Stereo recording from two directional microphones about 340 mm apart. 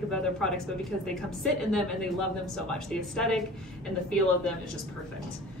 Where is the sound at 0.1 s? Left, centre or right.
Centre.